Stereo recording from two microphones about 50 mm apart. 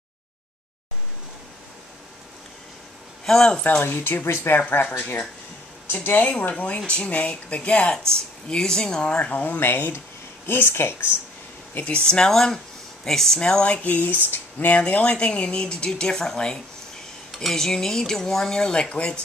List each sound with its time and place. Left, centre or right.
3.3 s speech: centre
3.6 s speech: left
6.5 s speech: left
8.1 s speech: centre; by 11.1 s left
11.7 s speech: left
12.3 s speech: centre
13.4 s speech: centre
13.8 s speech: left; by 16.6 s centre
17.3 s speech: centre